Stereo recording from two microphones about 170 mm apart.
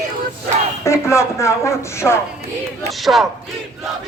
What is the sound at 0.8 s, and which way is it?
Speech, 15° left (ahead or behind).